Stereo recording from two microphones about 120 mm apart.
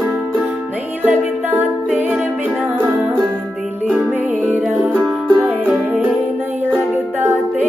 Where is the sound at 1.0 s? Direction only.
15° right (ahead or behind).